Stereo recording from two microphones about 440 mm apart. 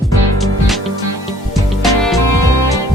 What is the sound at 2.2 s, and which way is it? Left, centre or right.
Music, left.